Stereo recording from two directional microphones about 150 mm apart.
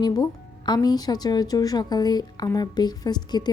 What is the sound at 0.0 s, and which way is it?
Speech, 25° left (ahead or behind).